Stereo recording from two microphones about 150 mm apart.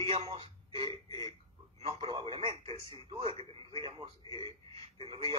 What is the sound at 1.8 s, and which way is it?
Radio, 40° right (ahead or behind).